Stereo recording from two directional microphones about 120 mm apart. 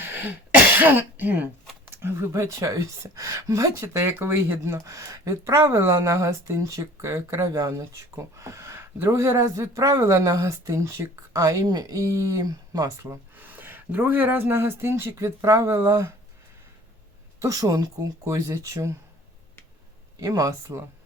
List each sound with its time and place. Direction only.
0.0 s cough: 20° right (ahead or behind)
1.9 s speech: 20° right (ahead or behind)
17.4 s speech: 30° right (ahead or behind)
20.1 s speech: 30° right (ahead or behind)